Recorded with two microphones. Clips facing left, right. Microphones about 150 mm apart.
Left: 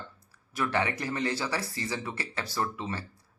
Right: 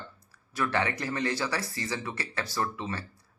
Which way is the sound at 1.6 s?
30° left (ahead or behind).